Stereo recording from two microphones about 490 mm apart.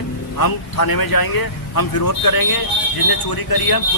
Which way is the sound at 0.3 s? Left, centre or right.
Left.